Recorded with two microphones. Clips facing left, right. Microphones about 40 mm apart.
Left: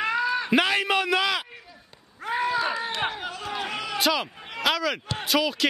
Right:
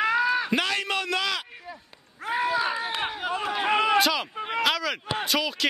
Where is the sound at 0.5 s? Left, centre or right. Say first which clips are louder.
Left 4 dB; centre.